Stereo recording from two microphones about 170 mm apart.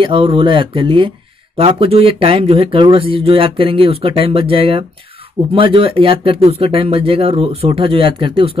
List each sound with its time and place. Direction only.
0.0 s speech: 30° right (ahead or behind)